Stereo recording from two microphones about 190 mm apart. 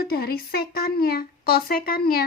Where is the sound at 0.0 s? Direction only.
55° left (ahead or behind).